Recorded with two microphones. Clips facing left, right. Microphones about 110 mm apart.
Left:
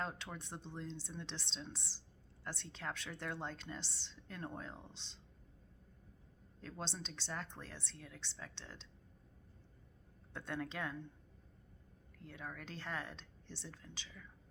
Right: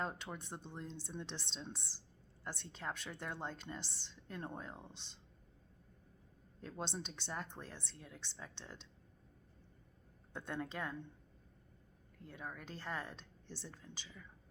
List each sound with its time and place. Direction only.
0.0 s a woman's voice: 10° right (ahead or behind)
3.8 s a woman's voice: 50° right (ahead or behind)
4.1 s a woman's voice: 10° right (ahead or behind)
6.6 s a woman's voice: 10° right (ahead or behind)
10.3 s a woman's voice: 10° right (ahead or behind)
12.2 s a woman's voice: 5° right (ahead or behind)